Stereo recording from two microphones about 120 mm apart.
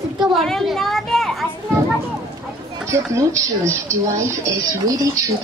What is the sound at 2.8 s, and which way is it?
A woman's voice, 25° right (ahead or behind).